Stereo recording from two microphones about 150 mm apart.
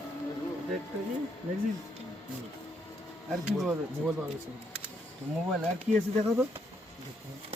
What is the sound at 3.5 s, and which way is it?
Speech, 5° right (ahead or behind).